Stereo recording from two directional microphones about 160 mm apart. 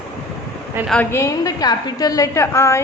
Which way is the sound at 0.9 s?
10° left (ahead or behind).